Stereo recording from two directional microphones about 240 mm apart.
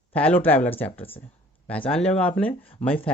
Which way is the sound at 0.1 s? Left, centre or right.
Centre.